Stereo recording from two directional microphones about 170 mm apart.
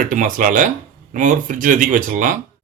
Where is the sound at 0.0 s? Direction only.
50° right (ahead or behind).